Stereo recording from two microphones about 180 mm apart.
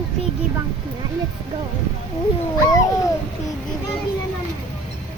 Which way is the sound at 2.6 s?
20° left (ahead or behind).